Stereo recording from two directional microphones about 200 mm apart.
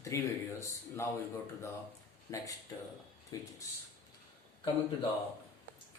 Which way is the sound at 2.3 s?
15° left (ahead or behind).